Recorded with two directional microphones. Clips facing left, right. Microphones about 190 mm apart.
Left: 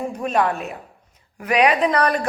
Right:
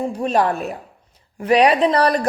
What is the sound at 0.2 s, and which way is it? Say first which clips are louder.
A woman's voice: right 2 dB; 35° right (ahead or behind).